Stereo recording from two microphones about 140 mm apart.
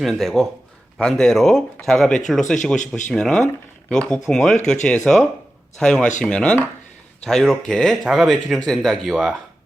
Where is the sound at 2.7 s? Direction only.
65° left (ahead or behind).